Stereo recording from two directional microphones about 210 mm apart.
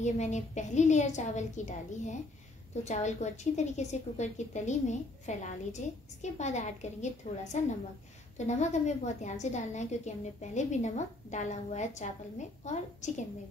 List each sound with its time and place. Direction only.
0.0 s a woman's voice: 35° left (ahead or behind)